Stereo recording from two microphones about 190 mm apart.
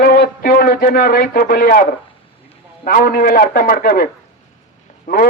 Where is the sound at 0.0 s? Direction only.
50° left (ahead or behind).